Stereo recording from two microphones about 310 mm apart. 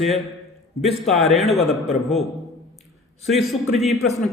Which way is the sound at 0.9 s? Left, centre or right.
Centre.